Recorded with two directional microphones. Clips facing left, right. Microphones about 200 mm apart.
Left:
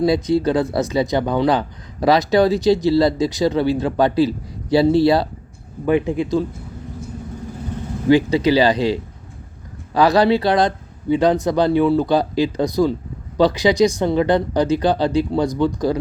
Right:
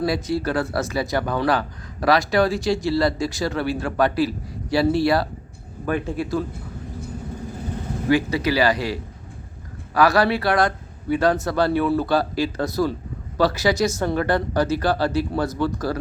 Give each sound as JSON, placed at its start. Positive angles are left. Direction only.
{"t": 0.0, "sound": "speech", "side_deg": 20}
{"t": 8.1, "sound": "speech", "side_deg": 20}